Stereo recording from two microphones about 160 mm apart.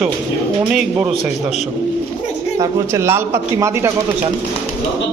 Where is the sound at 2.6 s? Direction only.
20° right (ahead or behind).